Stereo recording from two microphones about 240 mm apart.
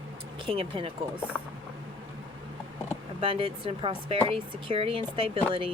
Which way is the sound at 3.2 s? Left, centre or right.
Right.